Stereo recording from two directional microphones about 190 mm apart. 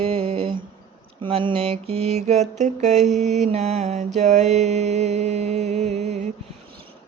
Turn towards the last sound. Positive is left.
turn(degrees=-35)  # may be behind; listen again after turning